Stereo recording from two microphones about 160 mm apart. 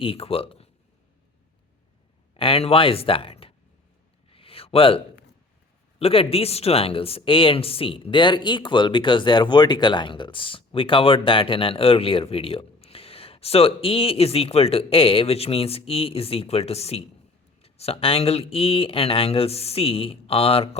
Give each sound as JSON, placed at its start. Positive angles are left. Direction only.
{"t": 0.0, "sound": "speech", "side_deg": 35}
{"t": 2.3, "sound": "speech", "side_deg": 35}
{"t": 4.3, "sound": "a sound", "side_deg": 35}
{"t": 6.0, "sound": "speech", "side_deg": 35}